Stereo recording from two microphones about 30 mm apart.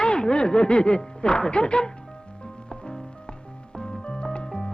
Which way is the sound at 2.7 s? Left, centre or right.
Left.